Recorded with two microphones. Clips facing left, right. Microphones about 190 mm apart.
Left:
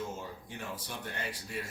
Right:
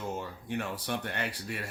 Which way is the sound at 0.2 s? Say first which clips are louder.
Right 7 dB; 70° right (ahead or behind).